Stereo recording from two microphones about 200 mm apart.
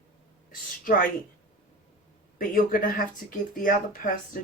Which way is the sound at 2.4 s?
45° left (ahead or behind).